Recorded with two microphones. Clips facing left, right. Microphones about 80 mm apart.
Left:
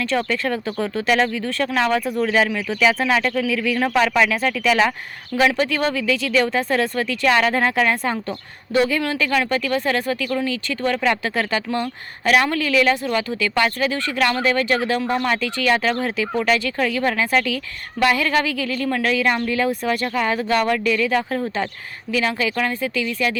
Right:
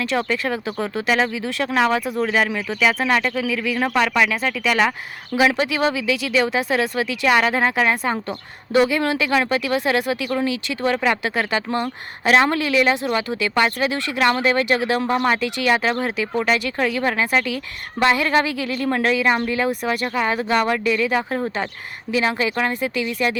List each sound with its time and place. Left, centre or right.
0.0 s speech: centre
8.7 s speech: right
12.2 s speech: right